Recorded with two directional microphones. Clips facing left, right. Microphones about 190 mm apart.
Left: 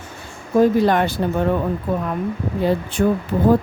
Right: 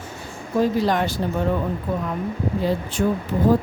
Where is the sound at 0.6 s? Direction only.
55° left (ahead or behind).